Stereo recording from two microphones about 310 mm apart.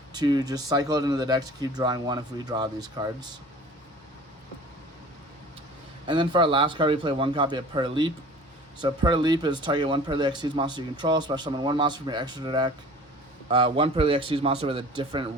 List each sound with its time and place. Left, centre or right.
0.1 s speech: centre
6.1 s speech: centre